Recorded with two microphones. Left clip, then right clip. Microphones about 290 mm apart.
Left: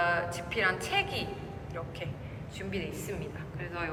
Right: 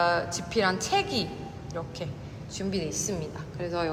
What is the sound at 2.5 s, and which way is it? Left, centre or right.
A woman's voice, centre.